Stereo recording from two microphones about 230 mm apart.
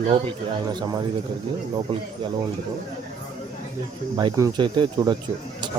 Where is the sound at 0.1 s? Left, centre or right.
Right.